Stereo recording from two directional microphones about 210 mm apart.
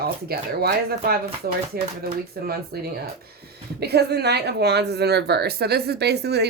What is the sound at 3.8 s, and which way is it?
A woman's voice, 50° right (ahead or behind).